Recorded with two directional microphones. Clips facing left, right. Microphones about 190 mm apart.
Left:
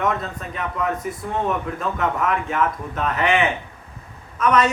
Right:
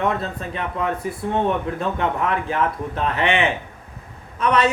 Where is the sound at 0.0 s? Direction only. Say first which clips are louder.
Right 1 dB; 30° right (ahead or behind).